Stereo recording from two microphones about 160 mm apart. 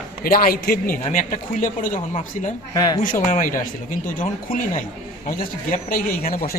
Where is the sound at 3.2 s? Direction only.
55° left (ahead or behind).